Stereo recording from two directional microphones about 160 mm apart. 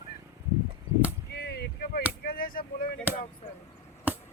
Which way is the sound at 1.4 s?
80° left.